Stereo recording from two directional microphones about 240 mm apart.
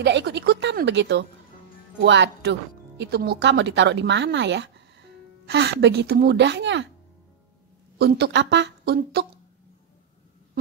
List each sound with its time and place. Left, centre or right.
0.0 s speech: right
8.0 s speech: right